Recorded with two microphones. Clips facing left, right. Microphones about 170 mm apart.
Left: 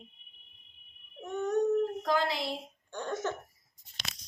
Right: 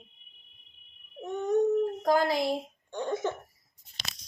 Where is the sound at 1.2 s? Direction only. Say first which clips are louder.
Right 3 dB; 15° right (ahead or behind).